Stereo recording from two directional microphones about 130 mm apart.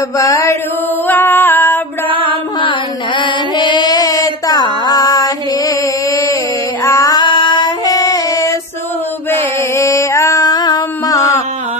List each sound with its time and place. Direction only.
0.2 s mantra: 25° left (ahead or behind)
1.0 s a sound: 15° left (ahead or behind)
3.2 s music: 35° left (ahead or behind)
6.8 s female singing: 25° left (ahead or behind)
7.2 s female singing: 40° left (ahead or behind)
9.8 s a sound: 20° left (ahead or behind)